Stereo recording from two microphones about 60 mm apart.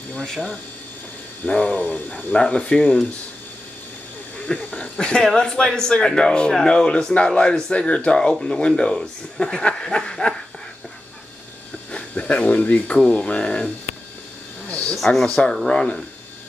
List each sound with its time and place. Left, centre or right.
1.4 s speech: left
4.5 s a sound: left
4.9 s speech: centre
11.9 s speech: left
14.7 s a sound: centre
15.0 s speech: centre